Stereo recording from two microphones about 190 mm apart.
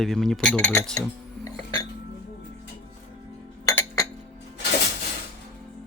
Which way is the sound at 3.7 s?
20° left (ahead or behind).